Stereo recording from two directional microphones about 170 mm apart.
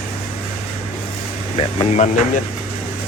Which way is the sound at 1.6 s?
35° left (ahead or behind).